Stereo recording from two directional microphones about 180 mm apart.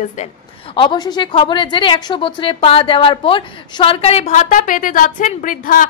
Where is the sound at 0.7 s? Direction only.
25° left (ahead or behind).